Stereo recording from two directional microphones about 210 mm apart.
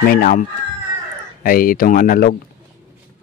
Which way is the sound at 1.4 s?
45° left (ahead or behind).